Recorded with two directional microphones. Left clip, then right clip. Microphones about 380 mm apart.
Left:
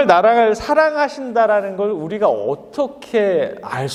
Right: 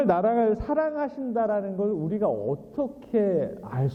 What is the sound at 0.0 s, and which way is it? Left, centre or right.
A man's voice, centre.